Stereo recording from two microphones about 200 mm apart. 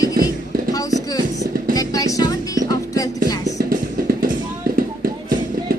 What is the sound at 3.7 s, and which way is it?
Music, 45° right (ahead or behind).